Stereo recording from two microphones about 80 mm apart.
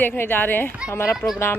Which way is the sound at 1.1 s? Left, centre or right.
Centre.